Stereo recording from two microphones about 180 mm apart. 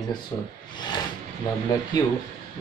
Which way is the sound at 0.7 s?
25° left (ahead or behind).